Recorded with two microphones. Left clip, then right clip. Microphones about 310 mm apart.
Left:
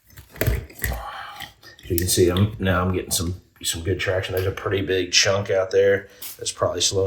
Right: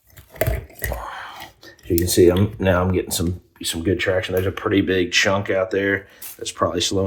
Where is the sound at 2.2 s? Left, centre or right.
Centre.